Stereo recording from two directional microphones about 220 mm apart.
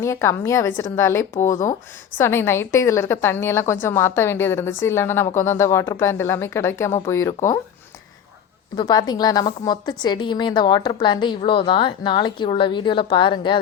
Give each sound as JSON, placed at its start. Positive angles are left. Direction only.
{"t": 0.0, "sound": "a woman's voice", "side_deg": 10}
{"t": 8.7, "sound": "a woman's voice", "side_deg": 15}